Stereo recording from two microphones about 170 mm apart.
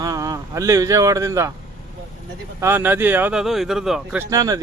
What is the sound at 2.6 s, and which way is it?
Speech, 15° right (ahead or behind).